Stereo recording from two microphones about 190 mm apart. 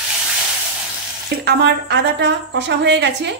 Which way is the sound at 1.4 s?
65° right (ahead or behind).